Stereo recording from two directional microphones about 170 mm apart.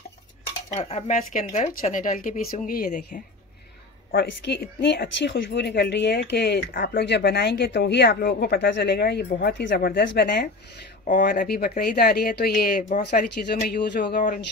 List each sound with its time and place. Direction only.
0.7 s speech: 40° left (ahead or behind); by 3.2 s 60° left (ahead or behind)
4.1 s speech: 75° left (ahead or behind)
11.1 s speech: 55° left (ahead or behind)